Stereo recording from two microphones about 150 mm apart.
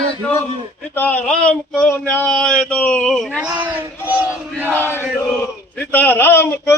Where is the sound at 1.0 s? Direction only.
10° left (ahead or behind).